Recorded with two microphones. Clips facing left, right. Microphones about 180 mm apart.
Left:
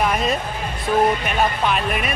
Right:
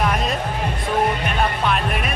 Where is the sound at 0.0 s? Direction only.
5° left (ahead or behind).